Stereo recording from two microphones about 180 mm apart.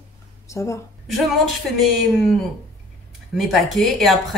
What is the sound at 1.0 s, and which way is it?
Speech, centre (ahead or behind).